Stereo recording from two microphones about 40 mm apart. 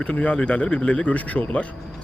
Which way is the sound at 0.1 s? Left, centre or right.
Left.